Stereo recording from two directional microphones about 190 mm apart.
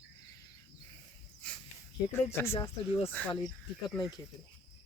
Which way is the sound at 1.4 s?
5° left (ahead or behind).